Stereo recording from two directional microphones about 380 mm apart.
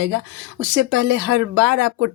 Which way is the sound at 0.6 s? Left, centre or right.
Right.